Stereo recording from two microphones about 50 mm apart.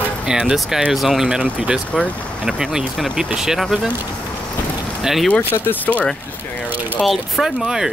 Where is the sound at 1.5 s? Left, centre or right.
Right.